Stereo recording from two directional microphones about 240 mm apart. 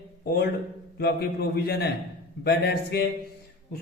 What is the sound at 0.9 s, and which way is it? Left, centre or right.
A man's voice, left.